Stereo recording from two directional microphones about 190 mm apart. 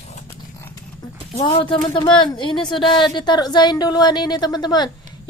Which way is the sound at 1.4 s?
25° left (ahead or behind).